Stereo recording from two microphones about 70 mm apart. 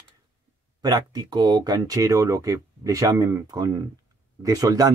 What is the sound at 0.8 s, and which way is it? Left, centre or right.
Speech, right.